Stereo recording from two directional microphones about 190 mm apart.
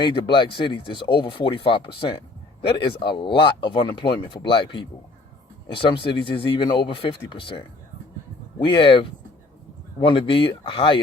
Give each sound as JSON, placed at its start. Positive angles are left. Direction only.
{"t": 0.0, "sound": "speech", "side_deg": 25}